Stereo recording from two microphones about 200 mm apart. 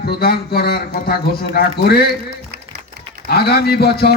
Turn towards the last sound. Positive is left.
turn(degrees=55)  # may be behind; listen again after turning